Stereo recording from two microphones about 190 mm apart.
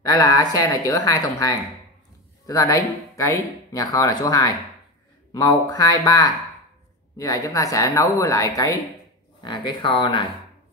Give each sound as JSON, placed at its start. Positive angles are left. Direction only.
{"t": 0.1, "sound": "a woman's voice", "side_deg": 20}